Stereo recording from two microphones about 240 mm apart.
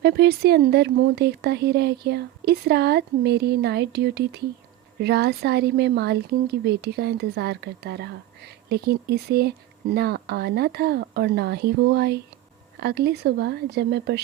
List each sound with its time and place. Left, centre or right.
0.0 s a woman's voice: right